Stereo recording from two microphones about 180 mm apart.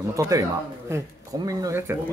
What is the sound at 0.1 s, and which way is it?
Speech, 15° right (ahead or behind).